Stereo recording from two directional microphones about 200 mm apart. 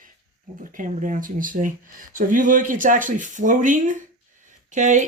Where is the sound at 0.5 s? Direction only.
40° right (ahead or behind).